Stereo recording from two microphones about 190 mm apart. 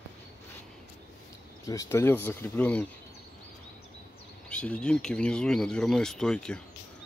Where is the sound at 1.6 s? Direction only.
15° left (ahead or behind).